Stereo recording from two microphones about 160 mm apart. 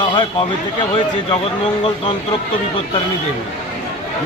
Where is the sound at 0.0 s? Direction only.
30° left (ahead or behind).